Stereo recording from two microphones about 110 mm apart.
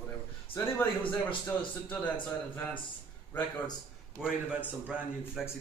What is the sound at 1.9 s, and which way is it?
Speech, 15° left (ahead or behind).